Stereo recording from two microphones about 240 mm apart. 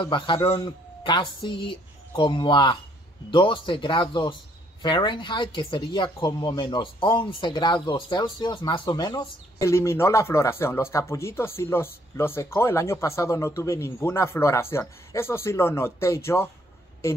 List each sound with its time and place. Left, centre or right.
0.0 s a woman's voice: left